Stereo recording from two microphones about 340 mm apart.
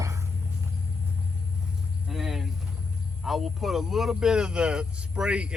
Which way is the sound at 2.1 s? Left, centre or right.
Centre.